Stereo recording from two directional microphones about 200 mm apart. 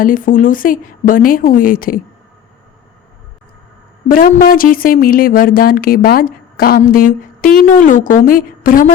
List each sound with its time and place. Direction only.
0.0 s a woman's voice: 45° left (ahead or behind)
4.1 s a woman's voice: 45° left (ahead or behind)